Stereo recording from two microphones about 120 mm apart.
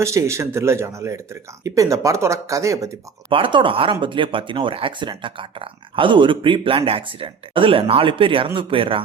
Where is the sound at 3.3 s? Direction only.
45° right (ahead or behind).